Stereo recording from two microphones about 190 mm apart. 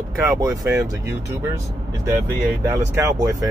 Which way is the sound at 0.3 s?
15° right (ahead or behind).